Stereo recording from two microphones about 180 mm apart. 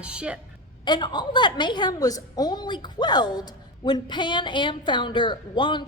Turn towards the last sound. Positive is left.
turn(degrees=25)  # may be behind; listen again after turning